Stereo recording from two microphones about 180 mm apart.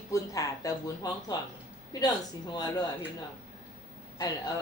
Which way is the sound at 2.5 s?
20° left (ahead or behind).